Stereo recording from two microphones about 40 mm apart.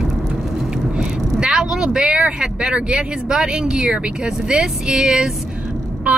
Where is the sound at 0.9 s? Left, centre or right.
Centre.